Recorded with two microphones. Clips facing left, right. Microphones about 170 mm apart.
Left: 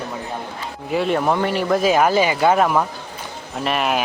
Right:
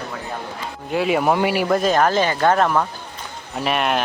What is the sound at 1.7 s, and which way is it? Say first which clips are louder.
Speech: left 3 dB; 10° left (ahead or behind).